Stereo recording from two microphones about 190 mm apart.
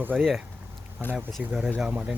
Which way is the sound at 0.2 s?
Centre (ahead or behind).